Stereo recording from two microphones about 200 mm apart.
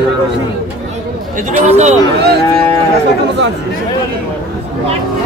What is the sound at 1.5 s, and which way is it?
Speech, 35° right (ahead or behind).